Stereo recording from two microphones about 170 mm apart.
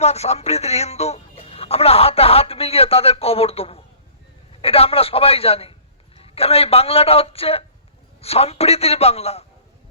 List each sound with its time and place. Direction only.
0.0 s a man's voice: 40° left (ahead or behind)